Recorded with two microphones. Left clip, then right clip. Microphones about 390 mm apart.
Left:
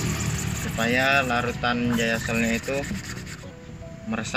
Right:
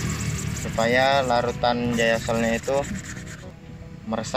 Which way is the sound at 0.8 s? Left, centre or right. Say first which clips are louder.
Right 2 dB; centre.